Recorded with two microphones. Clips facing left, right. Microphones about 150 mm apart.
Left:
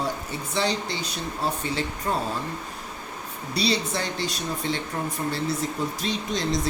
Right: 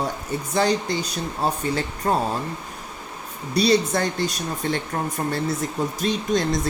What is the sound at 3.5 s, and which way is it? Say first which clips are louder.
Speech: right 7 dB; 45° right (ahead or behind).